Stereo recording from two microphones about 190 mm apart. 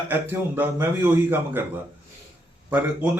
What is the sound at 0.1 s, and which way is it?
A man's voice, 10° right (ahead or behind).